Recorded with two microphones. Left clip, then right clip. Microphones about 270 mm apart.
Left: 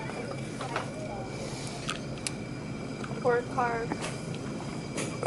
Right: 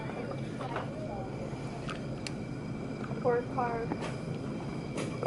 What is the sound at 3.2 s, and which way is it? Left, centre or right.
Speech, centre.